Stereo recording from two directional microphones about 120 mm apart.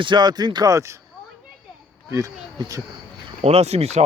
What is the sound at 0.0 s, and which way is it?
Speech, 40° right (ahead or behind).